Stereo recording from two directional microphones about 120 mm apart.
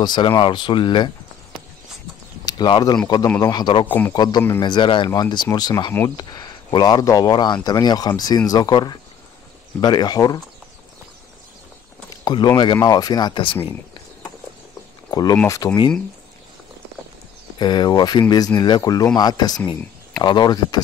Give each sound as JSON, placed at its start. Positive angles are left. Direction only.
{"t": 0.0, "sound": "speech", "side_deg": 40}
{"t": 2.4, "sound": "speech", "side_deg": 35}
{"t": 3.8, "sound": "a man's voice", "side_deg": 15}
{"t": 4.1, "sound": "speech", "side_deg": 35}
{"t": 12.3, "sound": "speech", "side_deg": 35}
{"t": 15.0, "sound": "speech", "side_deg": 35}
{"t": 17.6, "sound": "speech", "side_deg": 35}